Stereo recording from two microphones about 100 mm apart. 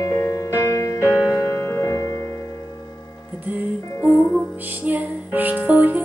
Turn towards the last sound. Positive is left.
turn(degrees=-20)  # may be behind; listen again after turning